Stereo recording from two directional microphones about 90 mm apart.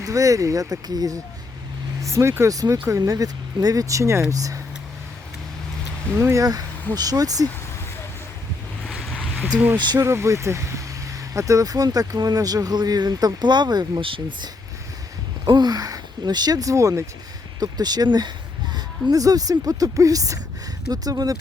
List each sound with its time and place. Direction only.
0.0 s speech: 40° right (ahead or behind)
2.0 s speech: 35° right (ahead or behind)
2.5 s speech: 40° right (ahead or behind)
6.1 s speech: 35° right (ahead or behind)
8.9 s a sound: 10° left (ahead or behind)
9.5 s speech: 15° right (ahead or behind)
9.7 s speech: 55° right (ahead or behind)
10.0 s speech: 35° right (ahead or behind); by 14.0 s 55° right (ahead or behind)
14.0 s speech: 75° right (ahead or behind)
15.4 s speech: 50° right (ahead or behind); by 17.1 s 35° right (ahead or behind)
17.6 s speech: 50° right (ahead or behind)